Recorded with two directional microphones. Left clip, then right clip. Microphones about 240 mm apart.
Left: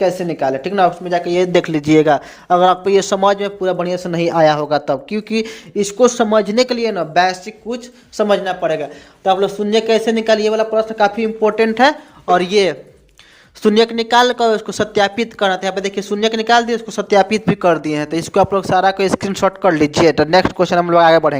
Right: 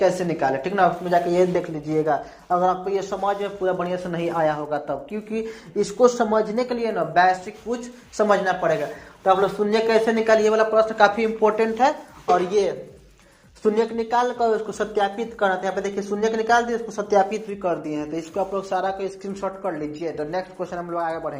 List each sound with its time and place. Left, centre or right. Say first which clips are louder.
0.0 s speech: left 4 dB; left
1.6 s speech: left 11 dB; left
13.6 s speech: left 8 dB; left